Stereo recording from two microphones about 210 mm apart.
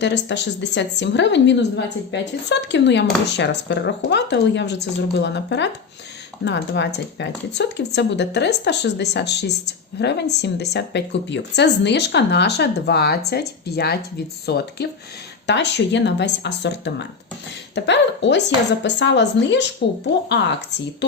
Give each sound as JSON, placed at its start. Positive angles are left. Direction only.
{"t": 0.0, "sound": "a woman's voice", "side_deg": 55}